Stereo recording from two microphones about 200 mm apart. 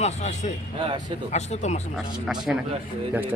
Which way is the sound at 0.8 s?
25° right (ahead or behind).